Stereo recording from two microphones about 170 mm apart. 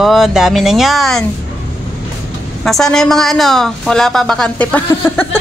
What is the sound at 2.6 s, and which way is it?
A woman's voice, centre (ahead or behind).